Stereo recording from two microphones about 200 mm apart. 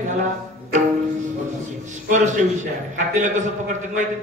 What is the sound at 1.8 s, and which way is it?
A man's voice, 35° right (ahead or behind).